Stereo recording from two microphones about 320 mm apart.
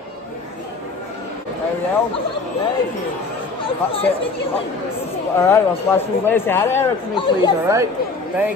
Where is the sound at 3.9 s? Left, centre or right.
Centre.